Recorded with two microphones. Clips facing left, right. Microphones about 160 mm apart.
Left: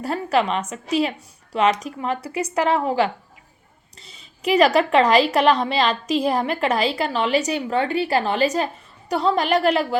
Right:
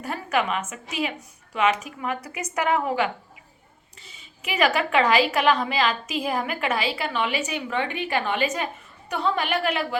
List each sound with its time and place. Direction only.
0.0 s a woman's voice: 30° left (ahead or behind)